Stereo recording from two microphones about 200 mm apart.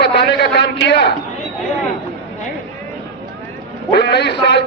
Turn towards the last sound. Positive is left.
turn(degrees=55)  # may be behind; listen again after turning